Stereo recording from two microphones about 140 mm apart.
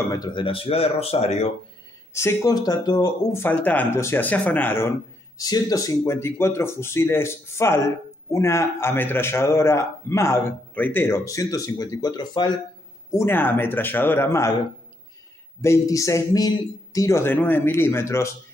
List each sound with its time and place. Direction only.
0.0 s speech: 25° left (ahead or behind); by 1.5 s 50° left (ahead or behind)
2.1 s speech: 20° left (ahead or behind)
3.3 s speech: 15° left (ahead or behind)
5.4 s speech: 25° left (ahead or behind)
13.1 s speech: 15° left (ahead or behind)
15.6 s speech: 20° left (ahead or behind)